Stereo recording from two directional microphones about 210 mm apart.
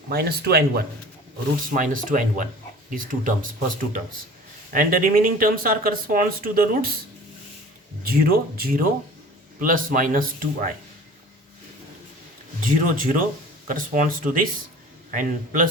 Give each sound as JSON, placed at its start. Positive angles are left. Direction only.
{"t": 0.1, "sound": "speech", "side_deg": -50}
{"t": 1.7, "sound": "speech", "side_deg": -40}
{"t": 8.0, "sound": "speech", "side_deg": -45}
{"t": 12.7, "sound": "speech", "side_deg": -40}